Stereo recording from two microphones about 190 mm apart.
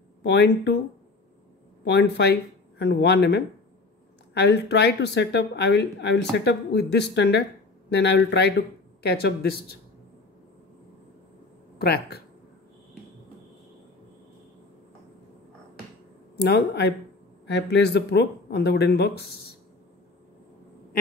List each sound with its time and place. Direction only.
0.2 s speech: 65° left (ahead or behind)
1.9 s speech: 60° left (ahead or behind)
11.8 s speech: 55° left (ahead or behind)
16.3 s speech: 60° left (ahead or behind)